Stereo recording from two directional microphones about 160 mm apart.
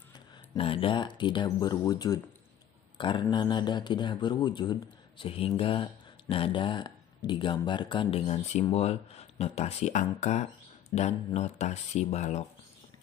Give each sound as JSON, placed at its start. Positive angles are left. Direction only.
{"t": 0.6, "sound": "speech", "side_deg": 35}